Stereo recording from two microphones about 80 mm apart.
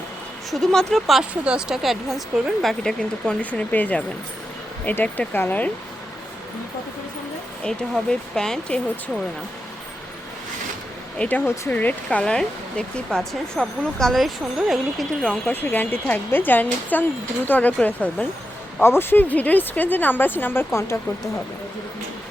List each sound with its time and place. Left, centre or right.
0.5 s a woman's voice: centre
1.2 s a woman's voice: centre
3.4 s speech: centre
7.6 s speech: centre
11.2 s speech: left; by 15.0 s centre
15.4 s speech: left
18.8 s speech: left